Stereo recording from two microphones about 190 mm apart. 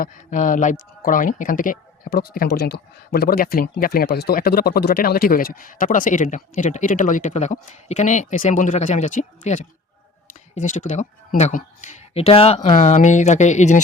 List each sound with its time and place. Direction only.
0.0 s speech: 40° left (ahead or behind)